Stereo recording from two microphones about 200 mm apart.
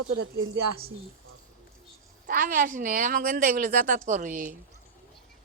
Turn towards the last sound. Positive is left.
turn(degrees=-45)  # may be behind; listen again after turning